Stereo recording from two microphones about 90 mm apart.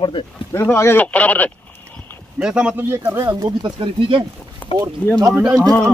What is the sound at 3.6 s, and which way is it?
Speech, 65° right (ahead or behind).